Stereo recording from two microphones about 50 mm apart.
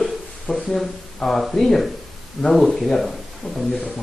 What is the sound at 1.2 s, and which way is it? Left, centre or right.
Speech, centre.